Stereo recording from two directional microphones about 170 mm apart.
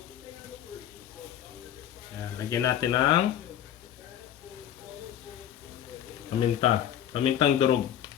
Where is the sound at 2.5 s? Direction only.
20° left (ahead or behind).